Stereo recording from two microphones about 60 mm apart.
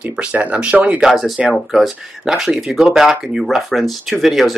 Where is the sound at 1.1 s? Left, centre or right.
Centre.